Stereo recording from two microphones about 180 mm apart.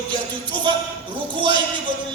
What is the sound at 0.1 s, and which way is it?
A man's voice, 25° right (ahead or behind).